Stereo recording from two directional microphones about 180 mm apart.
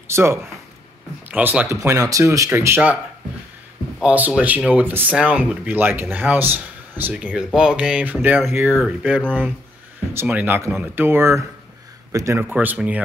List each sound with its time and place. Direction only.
0.1 s speech: 15° right (ahead or behind)
4.0 s speech: 5° right (ahead or behind)